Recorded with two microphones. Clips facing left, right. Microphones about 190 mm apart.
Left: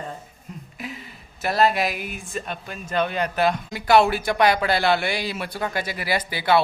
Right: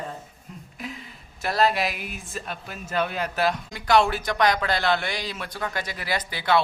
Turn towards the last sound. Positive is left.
turn(degrees=5)  # may be behind; listen again after turning